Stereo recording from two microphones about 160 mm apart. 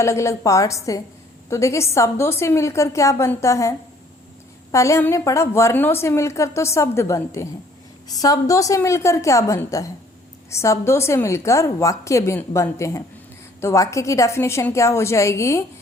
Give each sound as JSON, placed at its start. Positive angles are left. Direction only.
{"t": 0.0, "sound": "a woman's voice", "side_deg": 20}